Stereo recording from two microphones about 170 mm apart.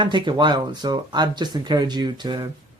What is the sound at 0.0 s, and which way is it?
Speech, 30° right (ahead or behind).